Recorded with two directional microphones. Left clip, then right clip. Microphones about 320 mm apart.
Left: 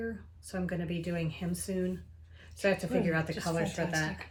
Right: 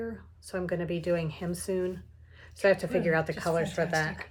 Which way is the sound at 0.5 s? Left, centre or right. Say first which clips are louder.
Right 5 dB; centre.